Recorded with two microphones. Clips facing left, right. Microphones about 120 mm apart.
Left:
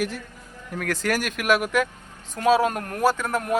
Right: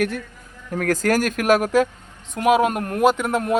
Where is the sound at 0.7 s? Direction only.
45° right (ahead or behind).